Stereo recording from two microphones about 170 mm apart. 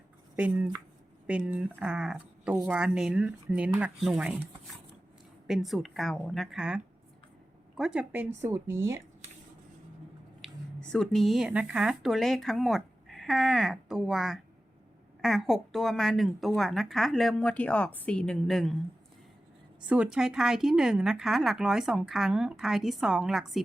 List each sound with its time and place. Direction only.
0.3 s speech: 10° right (ahead or behind)
5.5 s speech: centre (ahead or behind); by 9.0 s 15° right (ahead or behind)
10.4 s speech: 5° left (ahead or behind)
19.9 s speech: 5° right (ahead or behind)